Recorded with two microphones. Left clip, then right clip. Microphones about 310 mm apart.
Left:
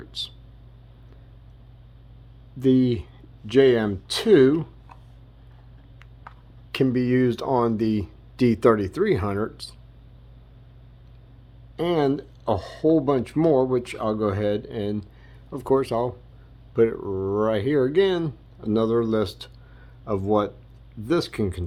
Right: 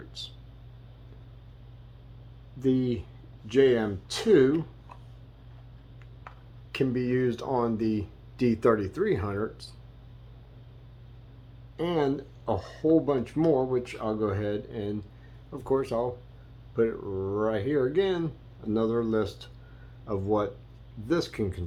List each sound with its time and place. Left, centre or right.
0.1 s speech: left
2.6 s speech: left
6.7 s speech: left
11.8 s speech: left